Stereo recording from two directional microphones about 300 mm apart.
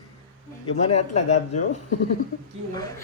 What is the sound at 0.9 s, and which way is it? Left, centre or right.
Speech, left.